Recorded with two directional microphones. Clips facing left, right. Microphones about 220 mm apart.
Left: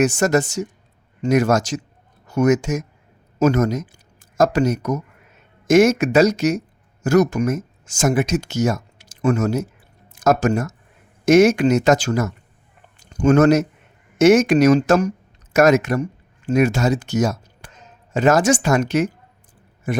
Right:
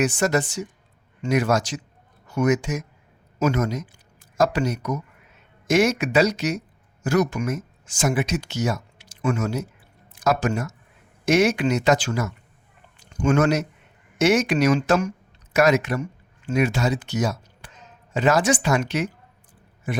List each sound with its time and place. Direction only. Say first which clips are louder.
0.0 s a man's voice: left 4 dB; 45° left (ahead or behind)